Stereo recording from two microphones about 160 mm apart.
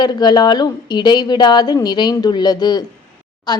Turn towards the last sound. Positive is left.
turn(degrees=25)  # may be behind; listen again after turning